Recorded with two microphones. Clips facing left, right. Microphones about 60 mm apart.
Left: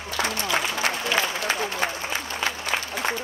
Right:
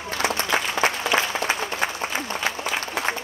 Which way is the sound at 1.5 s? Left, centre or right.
Centre.